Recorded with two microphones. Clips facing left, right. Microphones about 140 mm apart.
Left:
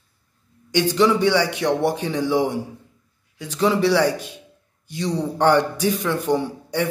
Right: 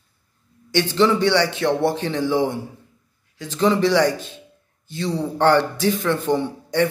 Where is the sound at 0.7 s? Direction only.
10° left (ahead or behind).